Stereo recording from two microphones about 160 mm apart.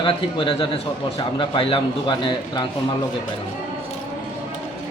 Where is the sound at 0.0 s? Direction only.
35° left (ahead or behind).